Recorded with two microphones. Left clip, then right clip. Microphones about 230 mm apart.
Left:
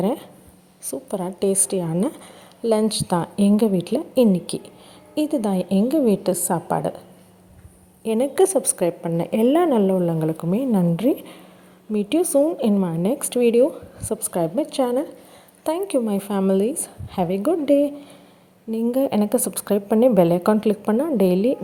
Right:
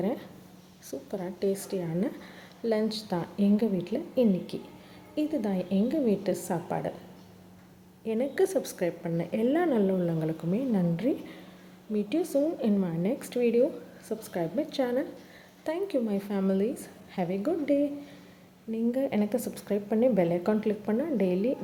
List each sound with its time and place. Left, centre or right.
0.0 s a woman's voice: left
8.0 s a woman's voice: left